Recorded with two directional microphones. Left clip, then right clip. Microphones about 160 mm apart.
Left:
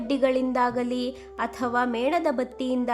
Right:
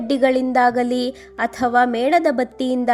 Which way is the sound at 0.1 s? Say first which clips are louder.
Right 7 dB; 30° right (ahead or behind).